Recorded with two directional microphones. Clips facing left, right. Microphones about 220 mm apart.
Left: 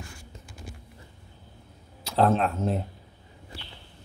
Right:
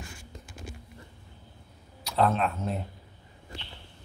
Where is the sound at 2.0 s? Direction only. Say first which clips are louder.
Left 3 dB; 30° left (ahead or behind).